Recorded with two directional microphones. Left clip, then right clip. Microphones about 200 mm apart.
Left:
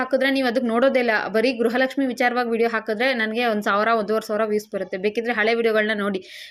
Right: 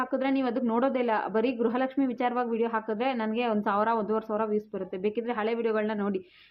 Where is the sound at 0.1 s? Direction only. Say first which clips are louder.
Left 8 dB; 10° left (ahead or behind).